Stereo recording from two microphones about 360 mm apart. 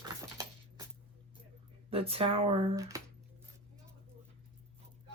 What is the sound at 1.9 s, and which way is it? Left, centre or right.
Speech, centre.